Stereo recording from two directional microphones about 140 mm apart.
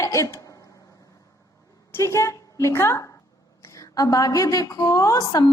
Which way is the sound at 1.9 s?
20° left (ahead or behind).